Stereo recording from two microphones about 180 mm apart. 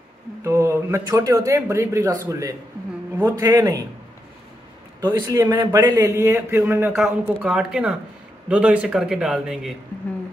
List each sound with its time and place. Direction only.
0.4 s a man's voice: 15° right (ahead or behind)
5.0 s a man's voice: 20° right (ahead or behind); by 9.8 s centre (ahead or behind)